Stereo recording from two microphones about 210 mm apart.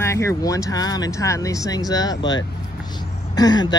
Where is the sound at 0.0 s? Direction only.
15° left (ahead or behind).